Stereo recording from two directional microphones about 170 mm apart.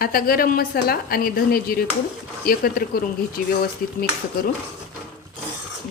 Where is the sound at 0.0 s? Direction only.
60° left (ahead or behind).